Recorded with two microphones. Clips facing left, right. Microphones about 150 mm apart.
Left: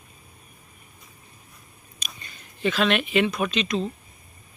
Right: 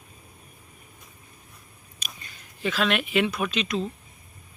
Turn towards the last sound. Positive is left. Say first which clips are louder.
# left 2 dB
turn(degrees=-5)  # may be behind; listen again after turning